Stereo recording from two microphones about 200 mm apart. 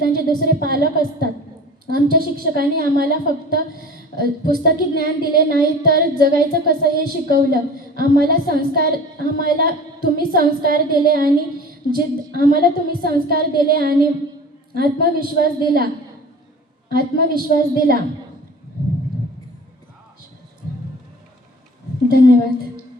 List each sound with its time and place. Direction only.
0.0 s a woman's voice: 50° right (ahead or behind)
16.9 s a woman's voice: 50° right (ahead or behind)